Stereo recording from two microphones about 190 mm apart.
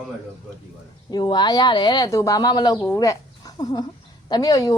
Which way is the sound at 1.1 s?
20° left (ahead or behind).